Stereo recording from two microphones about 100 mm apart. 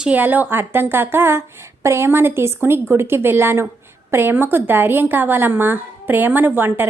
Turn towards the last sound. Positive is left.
turn(degrees=-20)  # may be behind; listen again after turning